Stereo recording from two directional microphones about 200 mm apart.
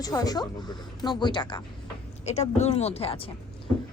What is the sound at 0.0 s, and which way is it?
A woman's voice, 20° left (ahead or behind).